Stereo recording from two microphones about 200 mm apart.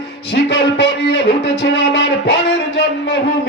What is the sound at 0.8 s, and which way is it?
Music, 60° left (ahead or behind).